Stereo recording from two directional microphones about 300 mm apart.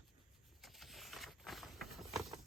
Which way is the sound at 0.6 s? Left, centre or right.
Centre.